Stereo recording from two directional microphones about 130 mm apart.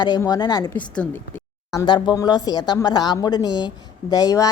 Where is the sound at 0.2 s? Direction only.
30° left (ahead or behind).